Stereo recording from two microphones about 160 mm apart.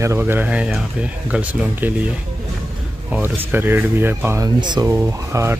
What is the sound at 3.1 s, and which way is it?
Speech, 15° right (ahead or behind).